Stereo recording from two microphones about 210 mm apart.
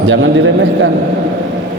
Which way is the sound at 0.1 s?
60° right (ahead or behind).